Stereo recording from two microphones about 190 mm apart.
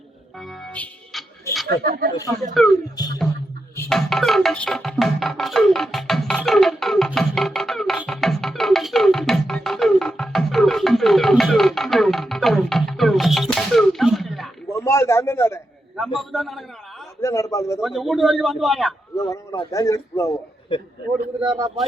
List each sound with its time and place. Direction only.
0.3 s music: 5° left (ahead or behind)
1.8 s speech: 55° right (ahead or behind)
2.6 s a man's voice: centre (ahead or behind)
3.0 s music: 20° left (ahead or behind)
3.8 s music: centre (ahead or behind)
14.7 s a man's voice: 15° left (ahead or behind)
16.1 s a man's voice: centre (ahead or behind)
17.2 s a man's voice: 15° left (ahead or behind)
17.7 s a man's voice: centre (ahead or behind)
19.1 s a man's voice: 15° left (ahead or behind)
20.7 s music: 25° left (ahead or behind)